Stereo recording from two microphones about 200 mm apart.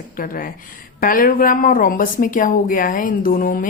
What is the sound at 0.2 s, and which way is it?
A woman's voice, 45° left (ahead or behind).